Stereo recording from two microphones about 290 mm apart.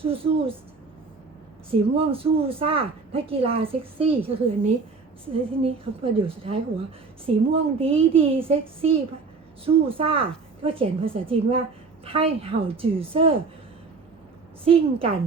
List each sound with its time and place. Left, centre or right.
0.0 s a woman's voice: centre
1.7 s a woman's voice: centre
14.6 s a woman's voice: centre